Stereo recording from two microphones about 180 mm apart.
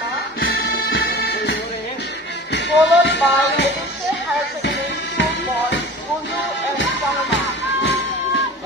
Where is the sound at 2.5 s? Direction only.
75° left (ahead or behind).